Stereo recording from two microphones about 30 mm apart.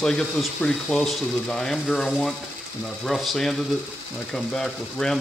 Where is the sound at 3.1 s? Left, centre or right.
Centre; by 5.1 s left.